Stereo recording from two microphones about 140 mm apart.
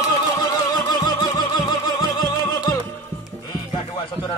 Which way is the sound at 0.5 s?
30° left (ahead or behind).